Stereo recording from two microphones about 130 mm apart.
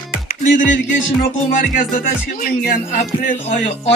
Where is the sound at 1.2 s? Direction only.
85° left.